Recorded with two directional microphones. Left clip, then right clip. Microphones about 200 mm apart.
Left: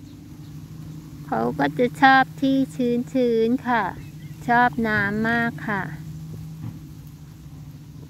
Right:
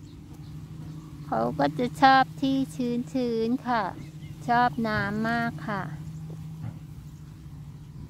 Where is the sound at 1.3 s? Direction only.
Centre (ahead or behind).